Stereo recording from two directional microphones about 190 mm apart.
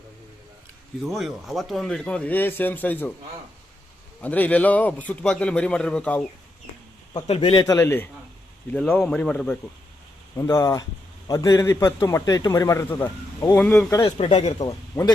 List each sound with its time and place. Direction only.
1.0 s a man's voice: centre (ahead or behind)
4.2 s a man's voice: 10° left (ahead or behind)
7.3 s a man's voice: 30° left (ahead or behind); by 13.8 s 10° left (ahead or behind)
13.9 s a man's voice: 25° left (ahead or behind)
14.6 s a man's voice: 20° left (ahead or behind)